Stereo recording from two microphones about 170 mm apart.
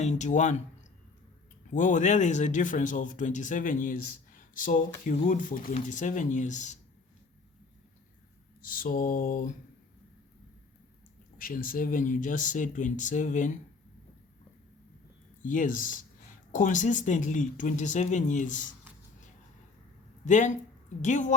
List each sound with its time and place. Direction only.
0.0 s speech: 45° left (ahead or behind)
1.7 s speech: 45° left (ahead or behind)
8.7 s mantra: 55° left (ahead or behind)
11.3 s speech: 55° left (ahead or behind)
15.4 s speech: 50° left (ahead or behind)
20.2 s speech: 45° left (ahead or behind)